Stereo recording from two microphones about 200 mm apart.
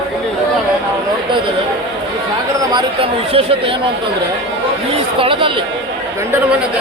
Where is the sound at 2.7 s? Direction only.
25° right (ahead or behind).